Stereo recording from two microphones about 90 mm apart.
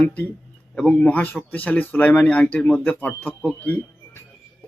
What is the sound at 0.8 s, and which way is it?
Speech, 15° left (ahead or behind).